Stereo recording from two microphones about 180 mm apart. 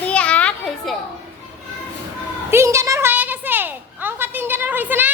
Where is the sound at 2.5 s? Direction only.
15° right (ahead or behind).